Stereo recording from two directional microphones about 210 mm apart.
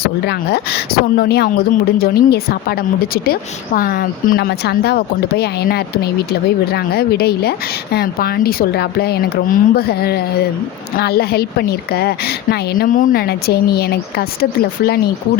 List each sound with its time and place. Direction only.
0.3 s a woman's voice: 50° left (ahead or behind)
3.8 s a woman's voice: 45° left (ahead or behind)